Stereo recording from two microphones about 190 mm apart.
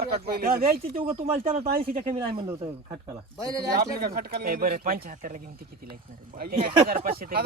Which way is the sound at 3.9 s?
50° right (ahead or behind).